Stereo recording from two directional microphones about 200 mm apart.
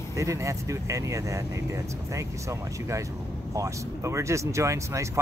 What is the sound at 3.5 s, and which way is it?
Speech, 15° right (ahead or behind).